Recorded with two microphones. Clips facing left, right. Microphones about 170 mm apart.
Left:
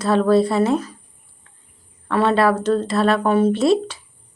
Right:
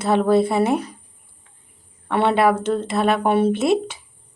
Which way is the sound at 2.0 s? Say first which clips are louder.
Even; 15° right (ahead or behind).